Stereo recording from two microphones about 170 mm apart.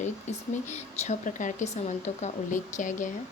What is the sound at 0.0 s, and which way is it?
Speech, 45° left (ahead or behind).